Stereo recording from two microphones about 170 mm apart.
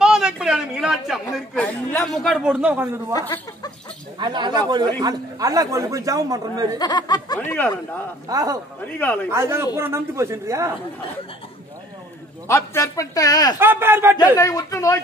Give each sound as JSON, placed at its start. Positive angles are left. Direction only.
{"t": 0.0, "sound": "speech", "side_deg": -5}
{"t": 3.1, "sound": "speech", "side_deg": 20}
{"t": 4.2, "sound": "speech", "side_deg": -25}
{"t": 6.8, "sound": "a man's voice", "side_deg": 25}
{"t": 7.3, "sound": "speech", "side_deg": 10}
{"t": 8.3, "sound": "speech", "side_deg": -20}
{"t": 8.8, "sound": "speech", "side_deg": 10}
{"t": 9.3, "sound": "a woman's voice", "side_deg": -15}
{"t": 12.4, "sound": "a man's voice", "side_deg": 15}
{"t": 13.6, "sound": "a woman's voice", "side_deg": -15}
{"t": 14.3, "sound": "a man's voice", "side_deg": 20}